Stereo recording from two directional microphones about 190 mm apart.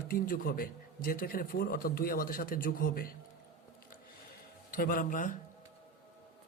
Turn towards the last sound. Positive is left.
turn(degrees=45)  # may be behind; listen again after turning